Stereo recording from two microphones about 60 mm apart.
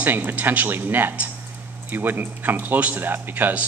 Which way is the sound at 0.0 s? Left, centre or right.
Right.